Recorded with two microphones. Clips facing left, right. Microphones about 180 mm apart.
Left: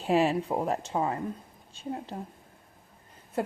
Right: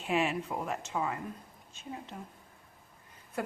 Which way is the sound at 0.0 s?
35° left (ahead or behind).